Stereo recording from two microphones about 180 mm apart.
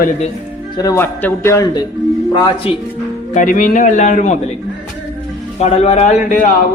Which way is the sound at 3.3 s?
45° left (ahead or behind).